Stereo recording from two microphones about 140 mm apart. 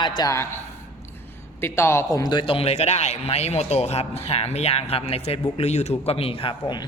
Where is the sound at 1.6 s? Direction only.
20° left (ahead or behind); by 6.8 s 35° left (ahead or behind).